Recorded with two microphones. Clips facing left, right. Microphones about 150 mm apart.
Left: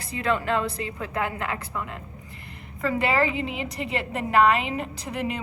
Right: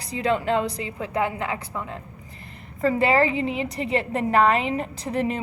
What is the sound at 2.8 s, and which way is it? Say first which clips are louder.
A woman's voice: right 4 dB; 40° right (ahead or behind).